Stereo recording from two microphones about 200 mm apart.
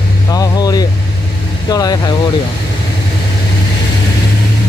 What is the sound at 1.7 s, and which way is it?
Speech, 20° left (ahead or behind).